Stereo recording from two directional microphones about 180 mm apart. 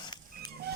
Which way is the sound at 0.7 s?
65° right (ahead or behind).